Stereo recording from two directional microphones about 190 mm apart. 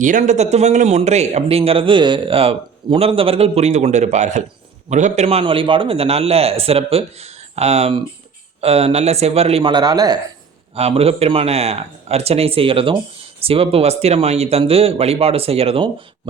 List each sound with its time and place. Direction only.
0.0 s speech: 45° right (ahead or behind); by 10.2 s 20° right (ahead or behind)
10.8 s speech: 30° right (ahead or behind)